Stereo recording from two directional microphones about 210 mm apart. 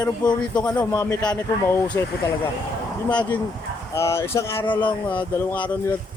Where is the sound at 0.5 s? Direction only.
5° left (ahead or behind).